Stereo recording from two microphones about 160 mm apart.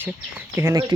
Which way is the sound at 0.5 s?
15° right (ahead or behind).